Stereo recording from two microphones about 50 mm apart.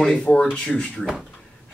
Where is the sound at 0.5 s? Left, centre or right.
Left.